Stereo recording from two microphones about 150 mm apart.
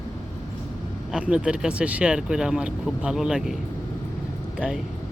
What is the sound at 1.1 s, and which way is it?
Speech, 5° right (ahead or behind).